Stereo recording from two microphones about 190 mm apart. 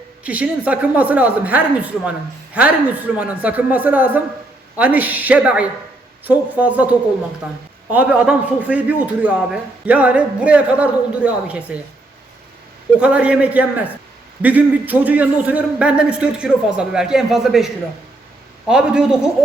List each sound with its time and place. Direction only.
0.3 s a man's voice: 5° right (ahead or behind)
13.0 s a man's voice: 5° right (ahead or behind)
18.7 s a man's voice: 5° right (ahead or behind)